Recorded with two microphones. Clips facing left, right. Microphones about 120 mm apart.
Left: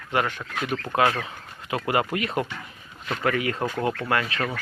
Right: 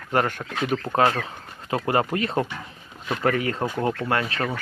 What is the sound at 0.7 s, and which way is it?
Speech, 15° right (ahead or behind).